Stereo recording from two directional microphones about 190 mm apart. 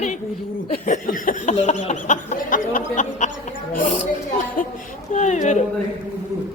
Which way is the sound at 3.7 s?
40° left (ahead or behind).